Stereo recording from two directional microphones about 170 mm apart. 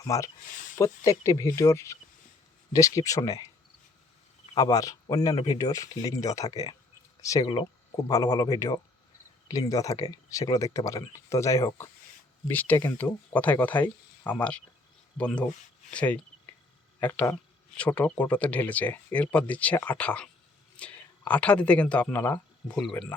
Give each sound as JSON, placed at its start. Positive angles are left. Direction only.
{"t": 0.0, "sound": "speech", "side_deg": 20}
{"t": 4.5, "sound": "speech", "side_deg": 20}